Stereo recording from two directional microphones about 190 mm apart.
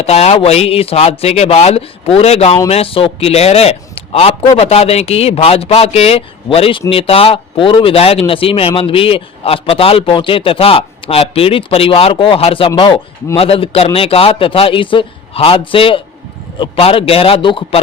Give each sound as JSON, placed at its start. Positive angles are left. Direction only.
{"t": 0.0, "sound": "a man's voice", "side_deg": 35}